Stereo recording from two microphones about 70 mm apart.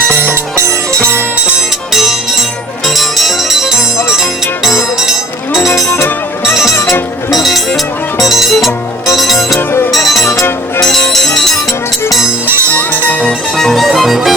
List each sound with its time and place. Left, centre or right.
1.9 s music: centre
5.6 s music: left
7.3 s music: centre
9.6 s music: left
10.8 s music: centre
12.9 s music: left
13.2 s music: centre